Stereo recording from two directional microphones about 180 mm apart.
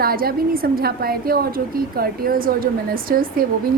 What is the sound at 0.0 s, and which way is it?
A woman's voice, 55° right (ahead or behind).